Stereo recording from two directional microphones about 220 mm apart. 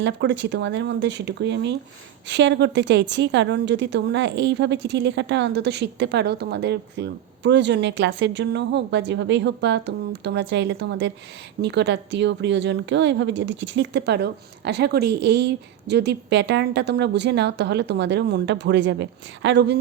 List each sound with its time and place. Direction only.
0.0 s a woman's voice: 55° right (ahead or behind)